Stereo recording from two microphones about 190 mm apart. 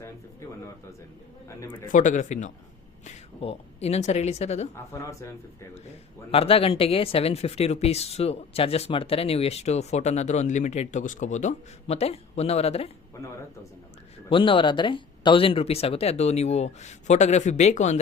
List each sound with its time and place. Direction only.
1.5 s speech: 15° left (ahead or behind)
1.9 s speech: 40° left (ahead or behind)
4.7 s speech: 15° left (ahead or behind)
6.3 s speech: 30° left (ahead or behind)
14.3 s speech: 25° left (ahead or behind)